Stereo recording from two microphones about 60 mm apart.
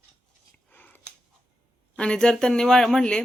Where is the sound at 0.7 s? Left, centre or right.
Left.